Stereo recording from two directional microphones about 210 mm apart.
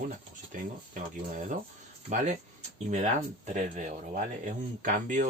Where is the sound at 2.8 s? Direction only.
35° right (ahead or behind).